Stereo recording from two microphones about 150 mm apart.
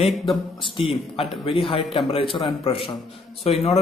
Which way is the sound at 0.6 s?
35° left (ahead or behind).